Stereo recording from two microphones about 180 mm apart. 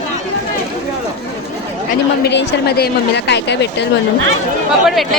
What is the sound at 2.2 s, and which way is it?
A woman's voice, 70° left (ahead or behind).